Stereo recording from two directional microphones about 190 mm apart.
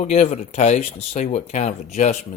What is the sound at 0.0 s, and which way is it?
Speech, 35° left (ahead or behind).